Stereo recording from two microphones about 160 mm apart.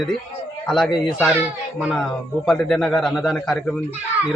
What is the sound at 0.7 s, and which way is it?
Speech, centre (ahead or behind).